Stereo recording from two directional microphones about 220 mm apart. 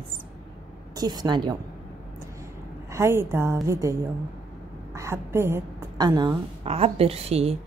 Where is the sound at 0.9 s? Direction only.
20° right (ahead or behind).